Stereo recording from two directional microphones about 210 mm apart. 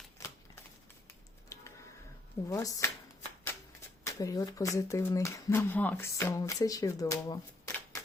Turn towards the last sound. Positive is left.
turn(degrees=20)  # may be behind; listen again after turning